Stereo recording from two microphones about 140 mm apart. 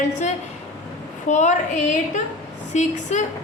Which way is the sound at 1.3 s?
60° left (ahead or behind).